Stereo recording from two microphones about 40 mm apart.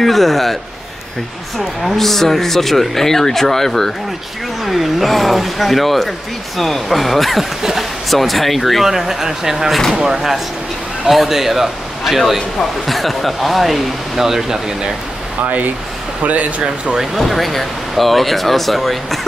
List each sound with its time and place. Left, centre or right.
0.0 s speech: centre
1.9 s speech: centre
11.1 s speech: centre
16.2 s speech: right
16.6 s speech: right
17.2 s speech: centre